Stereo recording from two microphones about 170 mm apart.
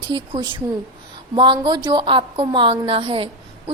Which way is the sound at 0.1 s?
30° right (ahead or behind).